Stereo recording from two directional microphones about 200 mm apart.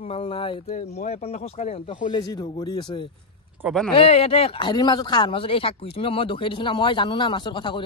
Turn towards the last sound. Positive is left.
turn(degrees=25)  # may be behind; listen again after turning